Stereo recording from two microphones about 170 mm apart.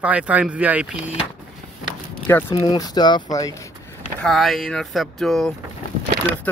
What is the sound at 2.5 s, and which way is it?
Speech, 25° left (ahead or behind).